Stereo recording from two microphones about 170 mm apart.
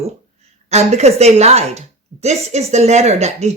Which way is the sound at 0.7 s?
40° right (ahead or behind).